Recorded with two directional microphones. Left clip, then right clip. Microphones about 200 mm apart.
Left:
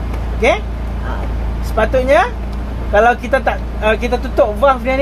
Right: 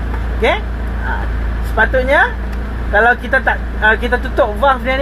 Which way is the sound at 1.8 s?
Centre (ahead or behind).